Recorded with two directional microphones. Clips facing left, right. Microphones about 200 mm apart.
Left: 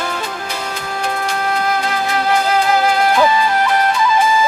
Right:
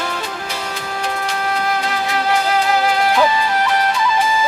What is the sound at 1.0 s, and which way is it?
Music, 50° left (ahead or behind).